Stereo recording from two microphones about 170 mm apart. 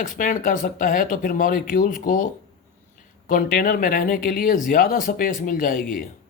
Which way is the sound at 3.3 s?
55° left (ahead or behind).